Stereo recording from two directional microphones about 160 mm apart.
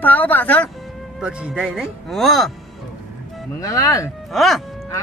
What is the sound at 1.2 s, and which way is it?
Speech, 5° right (ahead or behind).